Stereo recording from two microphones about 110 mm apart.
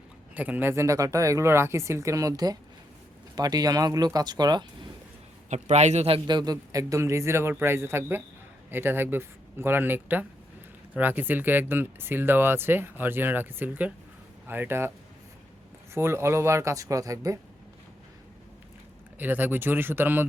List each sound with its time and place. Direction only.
0.3 s speech: 15° right (ahead or behind); by 4.6 s 40° right (ahead or behind)
5.5 s a man's voice: 90° right
6.2 s speech: 40° right (ahead or behind); by 14.9 s 20° right (ahead or behind)
16.0 s speech: 25° right (ahead or behind)
19.2 s speech: 15° right (ahead or behind)